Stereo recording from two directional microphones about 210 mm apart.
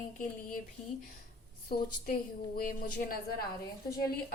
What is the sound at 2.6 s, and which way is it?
Speech, 45° left (ahead or behind).